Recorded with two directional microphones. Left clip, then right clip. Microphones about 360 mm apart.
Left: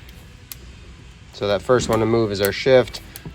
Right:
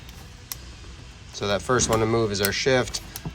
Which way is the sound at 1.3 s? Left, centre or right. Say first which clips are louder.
Left 5 dB; centre.